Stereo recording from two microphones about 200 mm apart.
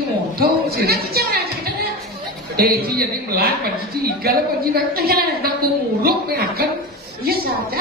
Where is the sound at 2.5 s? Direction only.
50° right (ahead or behind).